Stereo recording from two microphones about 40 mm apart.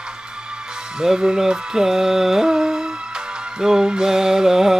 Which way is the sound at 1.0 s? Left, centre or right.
Centre.